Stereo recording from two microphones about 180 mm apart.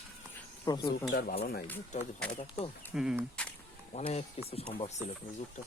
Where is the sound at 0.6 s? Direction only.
20° left (ahead or behind).